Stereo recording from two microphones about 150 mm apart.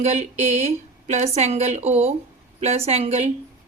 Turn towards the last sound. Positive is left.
turn(degrees=-45)  # may be behind; listen again after turning